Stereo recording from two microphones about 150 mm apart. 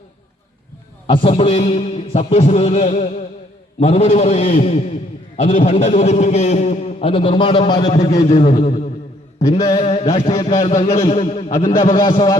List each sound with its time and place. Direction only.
1.0 s a man's voice: 40° left (ahead or behind)
7.9 s a man's voice: 50° left (ahead or behind)
11.5 s a man's voice: 60° left (ahead or behind)
11.9 s speech: 30° left (ahead or behind)